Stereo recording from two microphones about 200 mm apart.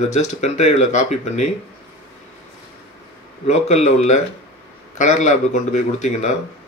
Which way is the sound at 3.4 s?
35° left (ahead or behind).